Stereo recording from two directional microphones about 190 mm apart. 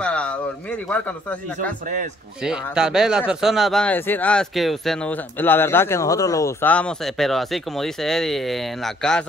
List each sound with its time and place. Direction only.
0.0 s speech: 5° left (ahead or behind)
2.4 s speech: 5° right (ahead or behind)